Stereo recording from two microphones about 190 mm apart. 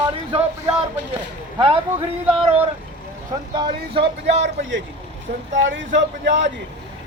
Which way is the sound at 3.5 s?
25° right (ahead or behind).